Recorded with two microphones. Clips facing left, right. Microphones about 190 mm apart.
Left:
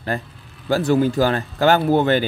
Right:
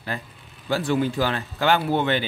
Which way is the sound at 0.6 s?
40° left (ahead or behind).